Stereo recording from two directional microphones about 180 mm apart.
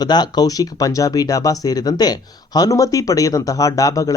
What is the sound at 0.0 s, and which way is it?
Speech, 25° left (ahead or behind).